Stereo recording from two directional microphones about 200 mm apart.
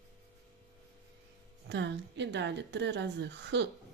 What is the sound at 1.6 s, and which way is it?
A woman's voice, 60° right (ahead or behind).